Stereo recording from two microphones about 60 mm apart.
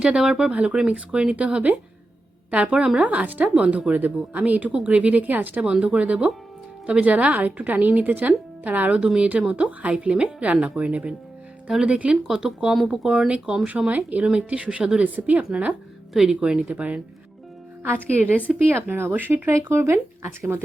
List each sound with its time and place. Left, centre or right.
0.0 s speech: centre
3.0 s speech: right
9.0 s speech: centre
16.1 s speech: centre; by 20.6 s right